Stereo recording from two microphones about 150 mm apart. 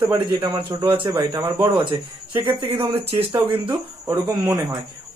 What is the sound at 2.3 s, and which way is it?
Speech, 35° right (ahead or behind).